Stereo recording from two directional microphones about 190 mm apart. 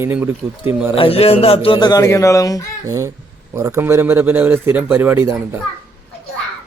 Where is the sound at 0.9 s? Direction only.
30° left (ahead or behind).